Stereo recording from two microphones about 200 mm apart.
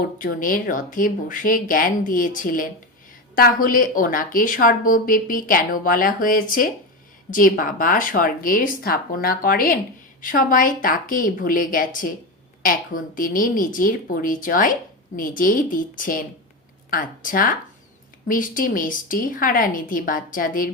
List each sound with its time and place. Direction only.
0.2 s speech: 45° left (ahead or behind)